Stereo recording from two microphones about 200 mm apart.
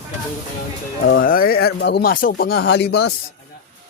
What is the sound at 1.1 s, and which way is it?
Speech, 45° left (ahead or behind).